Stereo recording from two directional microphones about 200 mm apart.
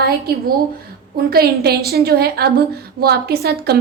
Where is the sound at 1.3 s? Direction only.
50° right (ahead or behind).